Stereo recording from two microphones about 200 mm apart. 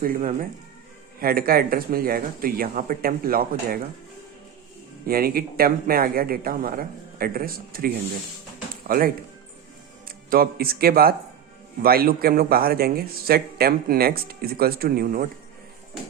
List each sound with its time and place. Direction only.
0.0 s speech: 45° right (ahead or behind)
5.0 s speech: 50° right (ahead or behind)